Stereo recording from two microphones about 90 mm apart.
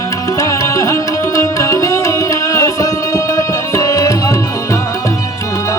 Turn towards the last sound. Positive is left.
turn(degrees=35)  # may be behind; listen again after turning